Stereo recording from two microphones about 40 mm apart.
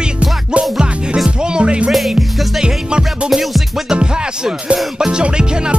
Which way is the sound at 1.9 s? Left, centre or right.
Centre.